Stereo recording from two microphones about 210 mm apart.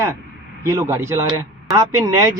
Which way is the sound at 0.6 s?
15° right (ahead or behind).